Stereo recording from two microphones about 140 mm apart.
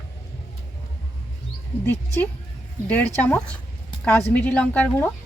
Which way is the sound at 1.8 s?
15° left (ahead or behind).